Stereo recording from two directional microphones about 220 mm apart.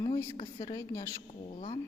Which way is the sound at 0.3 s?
25° left (ahead or behind).